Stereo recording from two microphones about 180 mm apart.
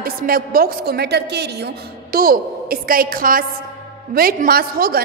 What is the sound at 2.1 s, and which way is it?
A woman's voice, 55° right (ahead or behind).